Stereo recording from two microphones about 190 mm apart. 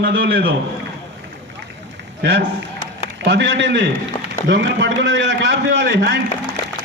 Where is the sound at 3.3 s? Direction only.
70° right (ahead or behind).